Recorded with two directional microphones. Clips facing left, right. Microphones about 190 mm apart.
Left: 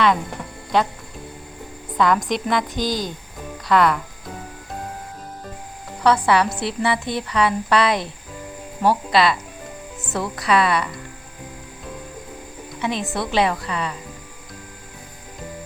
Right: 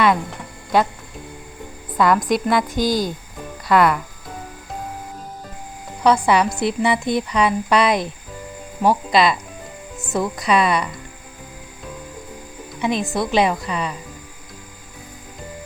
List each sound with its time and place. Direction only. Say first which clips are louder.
2.0 s speech: right 2 dB; 5° right (ahead or behind)
6.0 s speech: right 1 dB; 15° right (ahead or behind)
12.8 s speech: right 3 dB; 15° right (ahead or behind)